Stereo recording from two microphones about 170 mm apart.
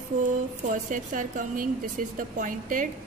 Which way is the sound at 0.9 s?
50° right (ahead or behind).